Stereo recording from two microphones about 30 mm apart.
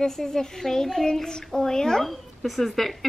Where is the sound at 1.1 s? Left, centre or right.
Left.